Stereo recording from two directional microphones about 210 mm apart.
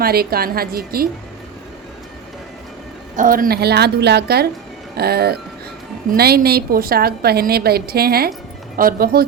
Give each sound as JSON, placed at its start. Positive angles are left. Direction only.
{"t": 0.0, "sound": "a woman's voice", "side_deg": -45}
{"t": 3.2, "sound": "a woman's voice", "side_deg": -40}